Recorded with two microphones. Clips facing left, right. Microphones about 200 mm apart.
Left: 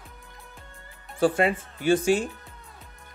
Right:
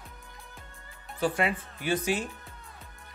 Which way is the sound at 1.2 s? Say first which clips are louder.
Left 6 dB; 30° left (ahead or behind).